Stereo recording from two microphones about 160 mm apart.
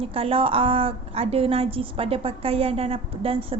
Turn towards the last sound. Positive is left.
turn(degrees=-35)  # may be behind; listen again after turning